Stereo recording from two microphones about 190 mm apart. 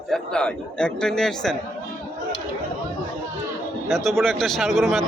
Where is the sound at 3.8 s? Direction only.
Centre (ahead or behind).